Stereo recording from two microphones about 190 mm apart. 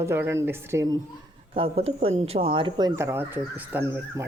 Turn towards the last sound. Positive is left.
turn(degrees=-10)  # may be behind; listen again after turning